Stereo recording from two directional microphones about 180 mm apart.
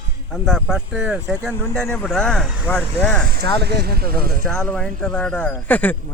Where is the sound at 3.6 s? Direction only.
65° right (ahead or behind).